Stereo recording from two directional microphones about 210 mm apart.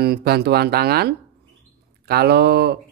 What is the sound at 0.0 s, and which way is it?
Speech, 50° right (ahead or behind).